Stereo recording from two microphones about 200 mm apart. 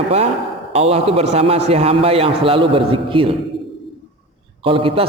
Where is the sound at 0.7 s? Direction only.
30° right (ahead or behind).